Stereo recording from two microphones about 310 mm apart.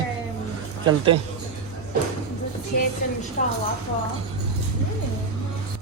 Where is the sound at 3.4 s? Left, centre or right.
Left.